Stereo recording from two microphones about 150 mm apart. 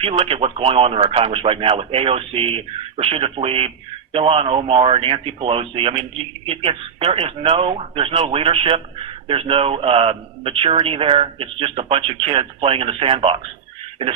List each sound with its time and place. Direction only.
0.0 s speech: 35° right (ahead or behind)